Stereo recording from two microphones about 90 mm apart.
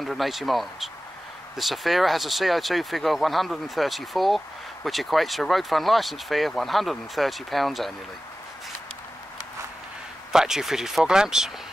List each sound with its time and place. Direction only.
0.0 s speech: centre (ahead or behind)
10.3 s speech: 5° right (ahead or behind)